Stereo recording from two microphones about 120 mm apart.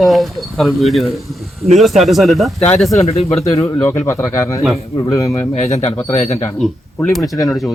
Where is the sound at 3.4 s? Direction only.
25° left (ahead or behind).